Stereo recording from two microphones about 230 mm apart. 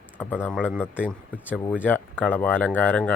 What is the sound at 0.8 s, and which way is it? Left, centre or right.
Speech, centre.